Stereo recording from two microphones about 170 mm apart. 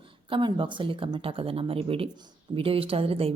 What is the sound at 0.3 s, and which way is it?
A woman's voice, 30° right (ahead or behind).